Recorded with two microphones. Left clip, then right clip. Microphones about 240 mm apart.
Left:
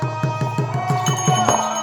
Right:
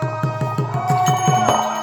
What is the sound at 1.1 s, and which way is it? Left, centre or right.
Music, centre.